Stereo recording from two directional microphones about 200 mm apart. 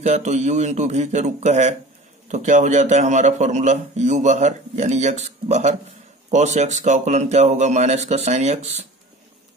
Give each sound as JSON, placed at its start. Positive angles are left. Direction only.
{"t": 0.0, "sound": "a man's voice", "side_deg": -35}